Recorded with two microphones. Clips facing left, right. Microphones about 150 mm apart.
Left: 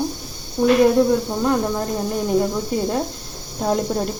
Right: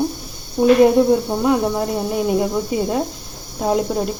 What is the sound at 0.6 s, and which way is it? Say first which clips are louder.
Speech: right 2 dB; 25° right (ahead or behind).